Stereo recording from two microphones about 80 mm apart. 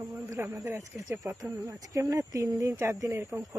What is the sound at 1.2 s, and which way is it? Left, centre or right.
Speech, right.